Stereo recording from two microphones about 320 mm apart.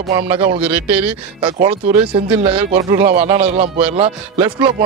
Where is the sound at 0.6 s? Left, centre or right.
Centre.